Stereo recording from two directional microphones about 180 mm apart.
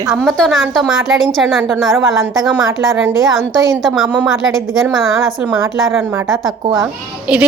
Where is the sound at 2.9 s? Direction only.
10° right (ahead or behind).